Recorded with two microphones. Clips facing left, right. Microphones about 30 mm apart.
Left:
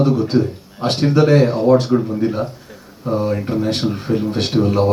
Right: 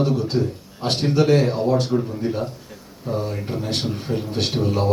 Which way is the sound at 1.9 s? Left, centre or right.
Left.